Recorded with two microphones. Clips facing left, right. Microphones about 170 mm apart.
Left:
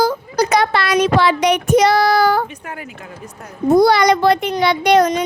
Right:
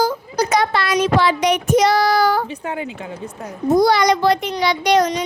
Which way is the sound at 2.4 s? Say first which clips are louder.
Right 6 dB; 25° right (ahead or behind).